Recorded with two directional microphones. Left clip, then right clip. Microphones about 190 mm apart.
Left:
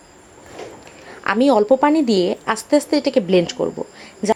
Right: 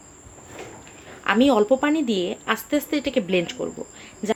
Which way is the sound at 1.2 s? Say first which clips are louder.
Left 3 dB; 20° left (ahead or behind).